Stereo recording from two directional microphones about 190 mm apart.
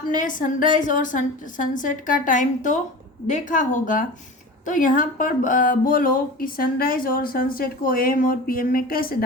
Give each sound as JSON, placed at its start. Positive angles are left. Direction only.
{"t": 0.2, "sound": "speech", "side_deg": 45}